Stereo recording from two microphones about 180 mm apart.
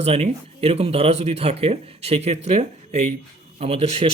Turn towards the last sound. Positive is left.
turn(degrees=-35)  # may be behind; listen again after turning